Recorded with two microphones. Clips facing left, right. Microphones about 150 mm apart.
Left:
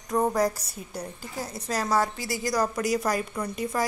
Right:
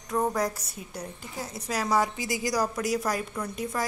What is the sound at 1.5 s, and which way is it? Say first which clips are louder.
A woman's voice: even; 10° right (ahead or behind).